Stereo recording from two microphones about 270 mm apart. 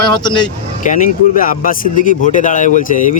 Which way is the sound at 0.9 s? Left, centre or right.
Left.